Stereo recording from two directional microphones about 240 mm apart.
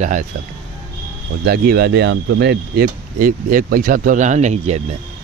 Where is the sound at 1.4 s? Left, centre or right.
Right.